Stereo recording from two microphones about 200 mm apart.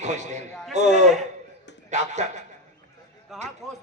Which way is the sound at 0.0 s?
35° right (ahead or behind).